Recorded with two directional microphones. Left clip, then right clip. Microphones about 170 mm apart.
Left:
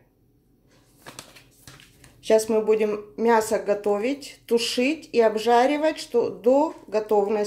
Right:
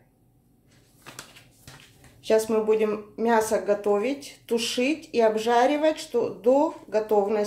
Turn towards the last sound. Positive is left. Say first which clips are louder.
# left 1 dB
turn(degrees=20)  # may be behind; listen again after turning